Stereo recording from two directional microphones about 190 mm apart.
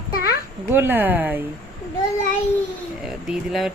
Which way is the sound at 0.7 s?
10° right (ahead or behind).